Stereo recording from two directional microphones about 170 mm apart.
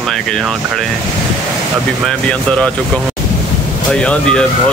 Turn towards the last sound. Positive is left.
turn(degrees=5)  # may be behind; listen again after turning